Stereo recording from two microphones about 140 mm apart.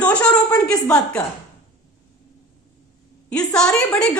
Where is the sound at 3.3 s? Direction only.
5° left (ahead or behind).